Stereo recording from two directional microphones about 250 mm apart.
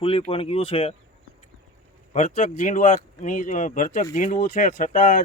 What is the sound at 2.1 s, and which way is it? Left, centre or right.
Speech, left.